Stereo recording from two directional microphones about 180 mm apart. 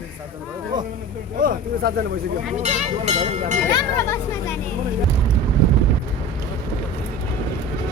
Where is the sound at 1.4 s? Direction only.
55° right (ahead or behind).